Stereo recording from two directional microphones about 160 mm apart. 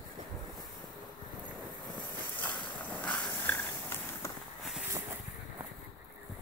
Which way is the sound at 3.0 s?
10° left (ahead or behind).